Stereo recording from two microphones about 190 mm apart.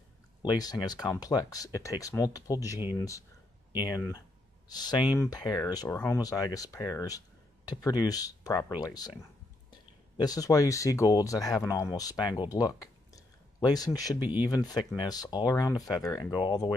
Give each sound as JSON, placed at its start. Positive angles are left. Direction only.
{"t": 0.4, "sound": "speech", "side_deg": 20}
{"t": 4.6, "sound": "speech", "side_deg": 20}
{"t": 14.2, "sound": "speech", "side_deg": -10}
{"t": 14.5, "sound": "speech", "side_deg": 20}